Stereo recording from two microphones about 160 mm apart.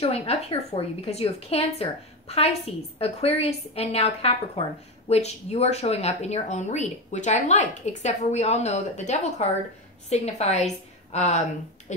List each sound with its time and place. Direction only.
0.0 s a woman's voice: 35° left (ahead or behind)